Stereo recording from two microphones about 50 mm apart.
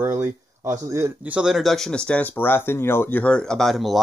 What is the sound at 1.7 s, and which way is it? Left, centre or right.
Speech, centre.